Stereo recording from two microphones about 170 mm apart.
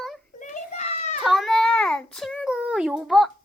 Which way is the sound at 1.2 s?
Centre (ahead or behind).